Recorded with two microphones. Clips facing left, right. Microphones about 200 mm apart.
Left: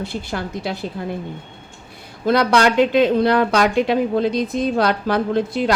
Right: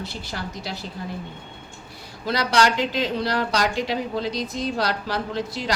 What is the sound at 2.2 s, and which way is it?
Speech, 55° left (ahead or behind).